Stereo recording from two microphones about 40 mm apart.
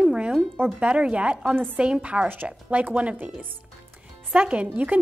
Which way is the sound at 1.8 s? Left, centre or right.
Right.